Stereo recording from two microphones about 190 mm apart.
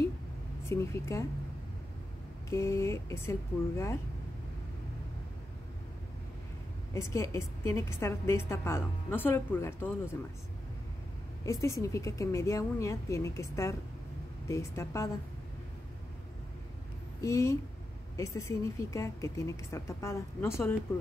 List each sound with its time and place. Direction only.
0.7 s a woman's voice: 15° left (ahead or behind)
2.5 s a woman's voice: 15° left (ahead or behind)
6.9 s a woman's voice: 15° left (ahead or behind)
11.4 s a woman's voice: 15° left (ahead or behind)
17.2 s a woman's voice: 15° left (ahead or behind)